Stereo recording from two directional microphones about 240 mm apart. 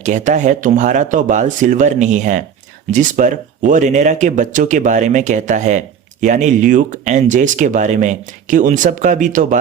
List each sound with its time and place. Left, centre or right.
0.0 s speech: right